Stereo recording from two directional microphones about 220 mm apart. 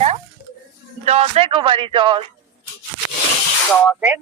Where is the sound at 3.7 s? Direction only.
5° left (ahead or behind).